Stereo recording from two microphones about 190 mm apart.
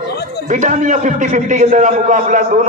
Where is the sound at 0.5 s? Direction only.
40° right (ahead or behind).